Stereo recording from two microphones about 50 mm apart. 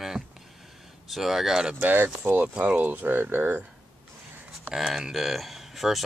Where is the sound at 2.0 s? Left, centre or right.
Right.